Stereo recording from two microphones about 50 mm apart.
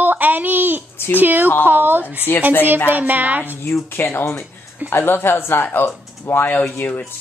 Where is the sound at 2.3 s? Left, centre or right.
Left.